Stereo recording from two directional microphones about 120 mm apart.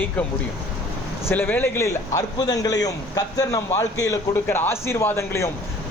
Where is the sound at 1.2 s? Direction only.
15° left (ahead or behind).